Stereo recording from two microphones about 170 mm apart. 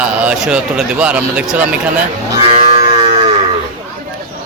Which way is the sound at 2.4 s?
35° right (ahead or behind).